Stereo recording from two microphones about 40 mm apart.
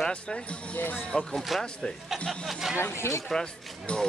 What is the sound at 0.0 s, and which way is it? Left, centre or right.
Speech, centre.